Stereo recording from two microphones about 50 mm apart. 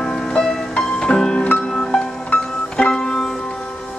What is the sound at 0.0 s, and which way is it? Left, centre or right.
Music, centre.